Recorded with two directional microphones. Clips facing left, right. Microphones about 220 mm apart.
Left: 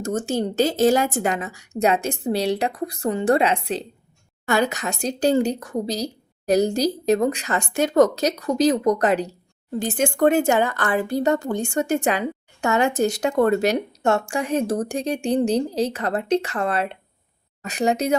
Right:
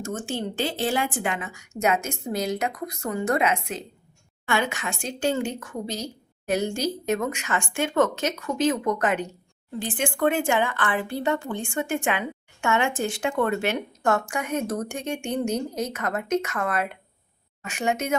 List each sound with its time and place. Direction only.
0.0 s speech: 40° left (ahead or behind)
14.0 s speech: 25° left (ahead or behind)